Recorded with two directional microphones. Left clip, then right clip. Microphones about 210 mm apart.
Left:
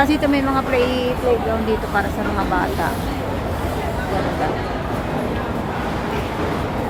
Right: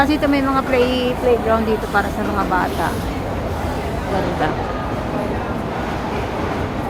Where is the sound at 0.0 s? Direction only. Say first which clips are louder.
Right 1 dB; 10° right (ahead or behind).